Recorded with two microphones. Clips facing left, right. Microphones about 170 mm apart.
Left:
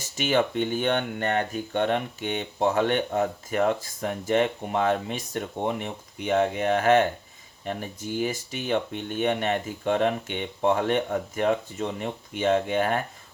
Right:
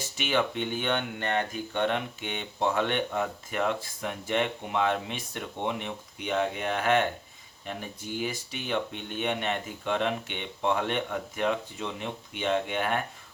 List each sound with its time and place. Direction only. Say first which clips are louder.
0.2 s speech: left 5 dB; 45° left (ahead or behind)